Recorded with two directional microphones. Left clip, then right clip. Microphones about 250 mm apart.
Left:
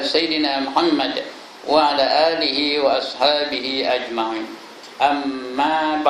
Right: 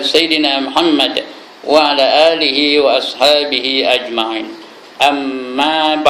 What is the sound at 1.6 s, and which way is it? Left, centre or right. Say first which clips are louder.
Speech: right 5 dB; centre.